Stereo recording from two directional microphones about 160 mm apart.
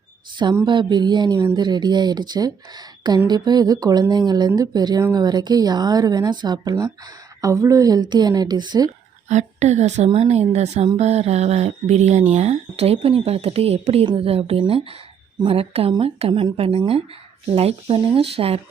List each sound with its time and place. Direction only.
0.5 s speech: 30° right (ahead or behind)
9.3 s a woman's voice: 45° right (ahead or behind)